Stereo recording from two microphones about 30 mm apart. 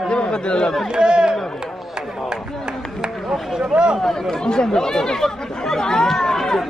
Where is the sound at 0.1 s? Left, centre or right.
Left.